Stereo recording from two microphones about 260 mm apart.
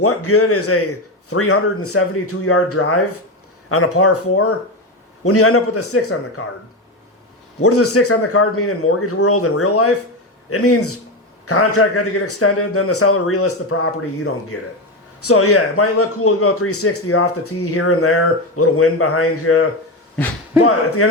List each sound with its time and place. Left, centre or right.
0.0 s a man's voice: left
7.6 s a man's voice: left
15.2 s a man's voice: left
20.7 s a man's voice: left